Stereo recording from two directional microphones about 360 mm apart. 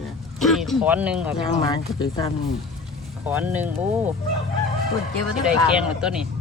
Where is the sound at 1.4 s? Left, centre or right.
Centre.